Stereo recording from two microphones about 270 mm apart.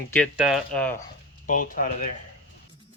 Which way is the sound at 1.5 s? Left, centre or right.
Left.